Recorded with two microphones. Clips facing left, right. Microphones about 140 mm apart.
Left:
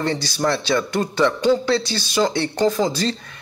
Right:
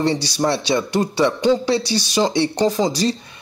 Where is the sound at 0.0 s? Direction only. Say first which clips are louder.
Right 2 dB; 15° right (ahead or behind).